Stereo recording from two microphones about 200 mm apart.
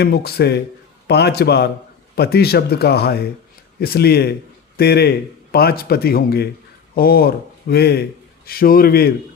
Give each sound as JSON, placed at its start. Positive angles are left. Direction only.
{"t": 0.0, "sound": "a man's voice", "side_deg": 50}